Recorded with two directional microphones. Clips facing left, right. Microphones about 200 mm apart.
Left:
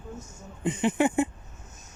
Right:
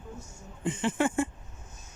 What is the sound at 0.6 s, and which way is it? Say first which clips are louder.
Speech: left 4 dB; 20° left (ahead or behind).